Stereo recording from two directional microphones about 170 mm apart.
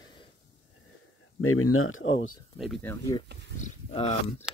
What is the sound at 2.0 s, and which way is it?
Speech, 90° left.